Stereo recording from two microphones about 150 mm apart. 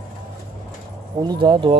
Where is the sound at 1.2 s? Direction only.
30° right (ahead or behind).